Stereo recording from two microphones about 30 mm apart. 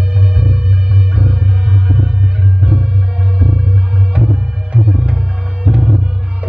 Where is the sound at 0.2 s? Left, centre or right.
Right.